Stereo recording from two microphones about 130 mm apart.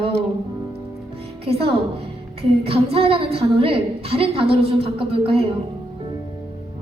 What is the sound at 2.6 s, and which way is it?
A woman's voice, 45° right (ahead or behind).